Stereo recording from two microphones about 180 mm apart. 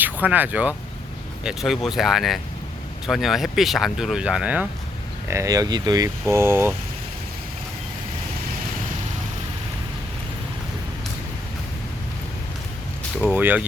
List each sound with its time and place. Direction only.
0.0 s speech: 10° right (ahead or behind)
5.3 s speech: 20° right (ahead or behind)
13.2 s speech: 10° right (ahead or behind)